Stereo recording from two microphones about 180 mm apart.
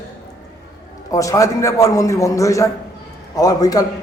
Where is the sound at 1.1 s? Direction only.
20° left (ahead or behind).